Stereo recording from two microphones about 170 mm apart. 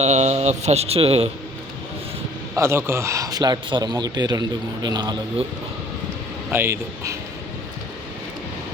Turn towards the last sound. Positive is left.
turn(degrees=-15)  # may be behind; listen again after turning